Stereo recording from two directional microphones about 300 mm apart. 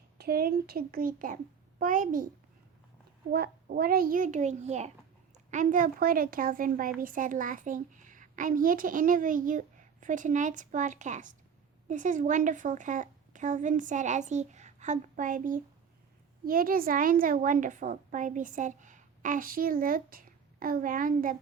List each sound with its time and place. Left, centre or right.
0.2 s a woman's voice: right
3.3 s a woman's voice: right